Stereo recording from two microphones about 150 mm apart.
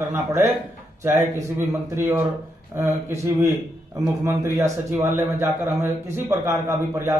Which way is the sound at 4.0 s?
20° right (ahead or behind).